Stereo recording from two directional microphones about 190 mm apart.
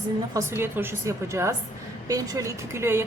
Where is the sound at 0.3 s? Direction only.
10° right (ahead or behind).